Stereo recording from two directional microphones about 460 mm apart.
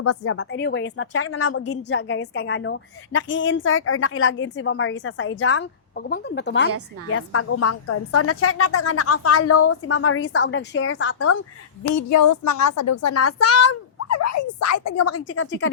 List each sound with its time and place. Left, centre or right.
0.0 s a woman's voice: left
11.8 s a woman's voice: left